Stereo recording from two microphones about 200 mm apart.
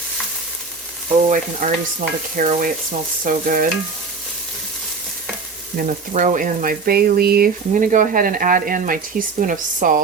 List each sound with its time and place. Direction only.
1.3 s stir: 40° right (ahead or behind)
3.2 s speech: 45° right (ahead or behind)
5.7 s speech: 40° right (ahead or behind)